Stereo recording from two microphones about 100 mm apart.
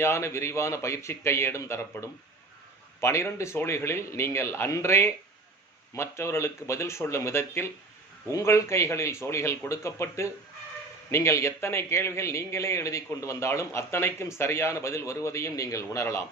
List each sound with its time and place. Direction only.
0.0 s a man's voice: 25° left (ahead or behind)